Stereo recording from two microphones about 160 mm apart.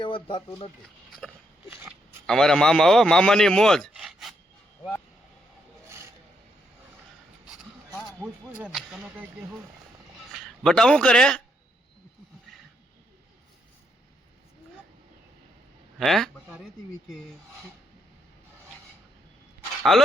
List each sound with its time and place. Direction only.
0.0 s speech: 30° left (ahead or behind)
2.2 s a man's voice: 5° left (ahead or behind)
8.2 s speech: 10° right (ahead or behind)
10.3 s a man's voice: centre (ahead or behind)
16.0 s a man's voice: centre (ahead or behind)
19.8 s speech: centre (ahead or behind)